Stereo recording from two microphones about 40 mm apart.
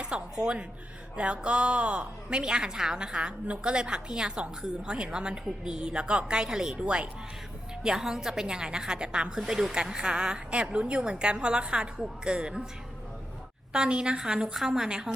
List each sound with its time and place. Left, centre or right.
0.0 s music: right
1.1 s speech: right
6.7 s speech: right
7.9 s speech: centre
9.5 s speech: centre
13.7 s speech: right